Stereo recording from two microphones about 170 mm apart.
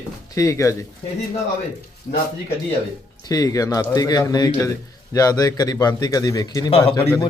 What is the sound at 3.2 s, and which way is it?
A man's voice, 20° left (ahead or behind).